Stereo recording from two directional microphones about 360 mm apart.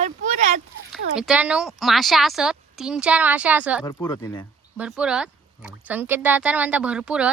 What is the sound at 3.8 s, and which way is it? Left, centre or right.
Speech, centre.